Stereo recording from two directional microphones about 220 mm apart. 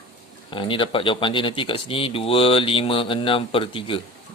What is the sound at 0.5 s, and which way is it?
Speech, 20° left (ahead or behind).